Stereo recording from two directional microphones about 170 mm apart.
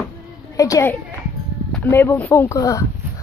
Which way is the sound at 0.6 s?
20° left (ahead or behind).